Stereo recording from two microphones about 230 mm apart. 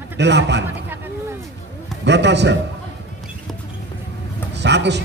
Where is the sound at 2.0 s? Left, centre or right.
Right.